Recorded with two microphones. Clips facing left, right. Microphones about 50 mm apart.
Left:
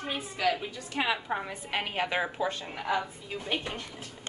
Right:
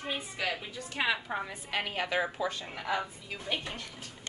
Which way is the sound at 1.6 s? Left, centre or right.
Left.